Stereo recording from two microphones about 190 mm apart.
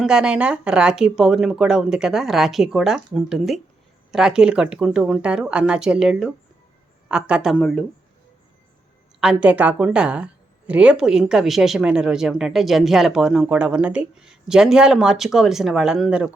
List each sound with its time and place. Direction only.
0.0 s speech: 5° right (ahead or behind)
9.2 s speech: 5° right (ahead or behind)